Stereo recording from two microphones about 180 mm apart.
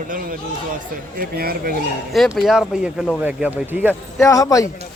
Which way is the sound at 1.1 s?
55° right (ahead or behind).